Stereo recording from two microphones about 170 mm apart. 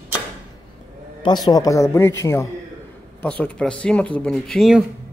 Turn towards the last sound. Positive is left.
turn(degrees=0)  # may be behind; listen again after turning